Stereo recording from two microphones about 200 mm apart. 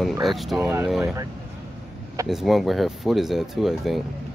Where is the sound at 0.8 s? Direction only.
Centre (ahead or behind).